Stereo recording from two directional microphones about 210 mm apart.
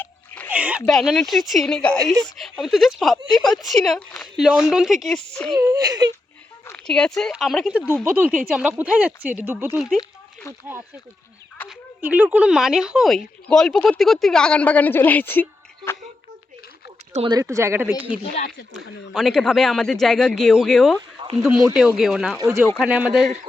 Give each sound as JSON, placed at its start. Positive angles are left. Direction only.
{"t": 0.5, "sound": "a sound", "side_deg": -5}
{"t": 0.9, "sound": "speech", "side_deg": 0}
{"t": 5.5, "sound": "a woman's voice", "side_deg": -15}
{"t": 6.7, "sound": "a sound", "side_deg": 5}
{"t": 7.2, "sound": "a woman's voice", "side_deg": 0}
{"t": 10.0, "sound": "a sound", "side_deg": 15}
{"t": 12.0, "sound": "speech", "side_deg": -10}
{"t": 17.1, "sound": "speech", "side_deg": -30}
{"t": 17.3, "sound": "a woman's voice", "side_deg": -15}
{"t": 18.2, "sound": "speech", "side_deg": 35}
{"t": 18.7, "sound": "speech", "side_deg": 0}
{"t": 22.4, "sound": "a woman's voice", "side_deg": -15}